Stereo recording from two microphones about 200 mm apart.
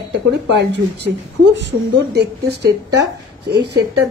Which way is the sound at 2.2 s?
55° right (ahead or behind).